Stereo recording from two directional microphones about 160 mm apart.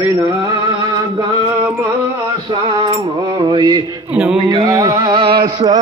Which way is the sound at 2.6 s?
30° right (ahead or behind).